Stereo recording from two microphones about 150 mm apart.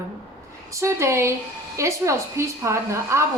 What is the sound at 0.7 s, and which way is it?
A woman's voice, 20° right (ahead or behind).